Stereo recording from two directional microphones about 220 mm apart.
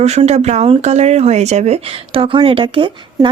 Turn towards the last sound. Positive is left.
turn(degrees=-20)  # may be behind; listen again after turning